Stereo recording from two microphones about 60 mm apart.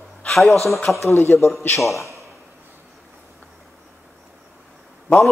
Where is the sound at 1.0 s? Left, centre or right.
Left.